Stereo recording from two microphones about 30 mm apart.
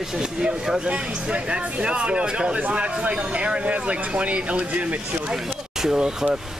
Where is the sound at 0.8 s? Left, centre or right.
Right.